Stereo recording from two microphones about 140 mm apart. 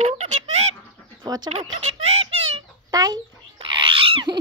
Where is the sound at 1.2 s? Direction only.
30° right (ahead or behind).